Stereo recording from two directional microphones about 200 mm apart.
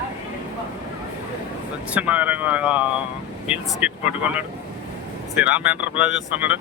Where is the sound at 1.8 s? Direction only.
5° right (ahead or behind).